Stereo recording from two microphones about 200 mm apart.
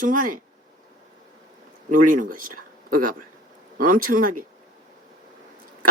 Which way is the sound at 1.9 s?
40° right (ahead or behind).